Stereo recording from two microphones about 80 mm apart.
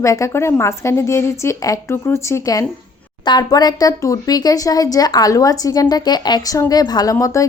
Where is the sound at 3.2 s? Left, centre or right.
Left.